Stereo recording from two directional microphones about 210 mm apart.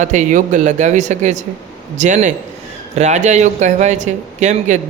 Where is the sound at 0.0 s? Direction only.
35° right (ahead or behind).